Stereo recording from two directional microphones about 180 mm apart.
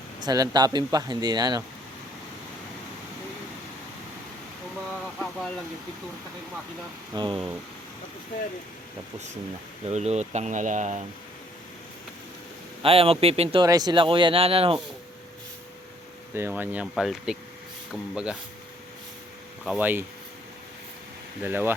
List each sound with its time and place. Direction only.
0.2 s speech: 20° right (ahead or behind)
4.9 s a sound: centre (ahead or behind)
7.1 s speech: 25° right (ahead or behind)
9.8 s speech: 35° right (ahead or behind)
12.8 s speech: 30° right (ahead or behind)
13.7 s speech: 20° right (ahead or behind)
16.3 s speech: 10° right (ahead or behind)
19.6 s speech: 5° right (ahead or behind)
21.4 s speech: 10° right (ahead or behind)